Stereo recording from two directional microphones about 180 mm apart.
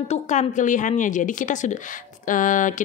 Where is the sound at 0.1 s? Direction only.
40° left (ahead or behind).